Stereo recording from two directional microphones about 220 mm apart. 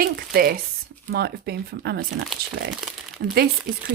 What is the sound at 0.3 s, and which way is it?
Speech, 40° right (ahead or behind).